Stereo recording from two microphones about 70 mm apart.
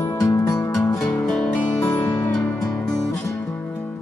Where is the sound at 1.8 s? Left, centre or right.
Left.